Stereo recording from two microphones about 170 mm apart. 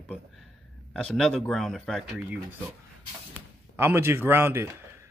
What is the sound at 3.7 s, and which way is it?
Speech, 15° right (ahead or behind).